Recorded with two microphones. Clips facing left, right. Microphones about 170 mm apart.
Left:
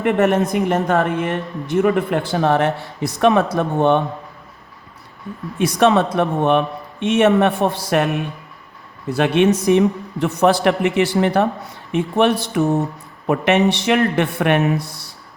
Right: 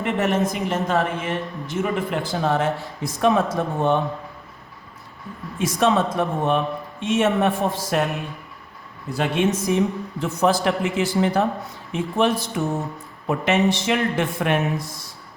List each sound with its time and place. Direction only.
0.0 s a woman's voice: 60° left (ahead or behind)
5.5 s a man's voice: 65° left (ahead or behind)
9.0 s a man's voice: 70° left (ahead or behind)